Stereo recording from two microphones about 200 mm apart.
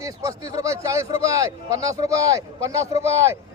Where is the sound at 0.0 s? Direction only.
15° right (ahead or behind).